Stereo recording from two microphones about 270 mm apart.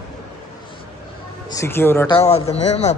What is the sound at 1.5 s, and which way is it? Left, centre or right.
Speech, centre.